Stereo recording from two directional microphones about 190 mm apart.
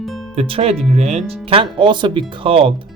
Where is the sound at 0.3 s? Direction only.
30° right (ahead or behind).